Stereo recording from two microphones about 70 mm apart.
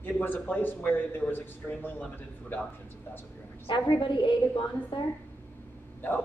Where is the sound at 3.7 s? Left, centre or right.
Left.